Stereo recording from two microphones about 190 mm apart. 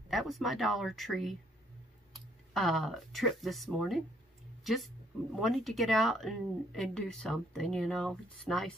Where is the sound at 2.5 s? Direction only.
Centre (ahead or behind).